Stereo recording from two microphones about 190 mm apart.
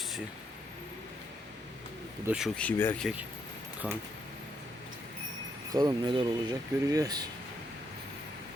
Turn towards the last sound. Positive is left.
turn(degrees=-20)  # may be behind; listen again after turning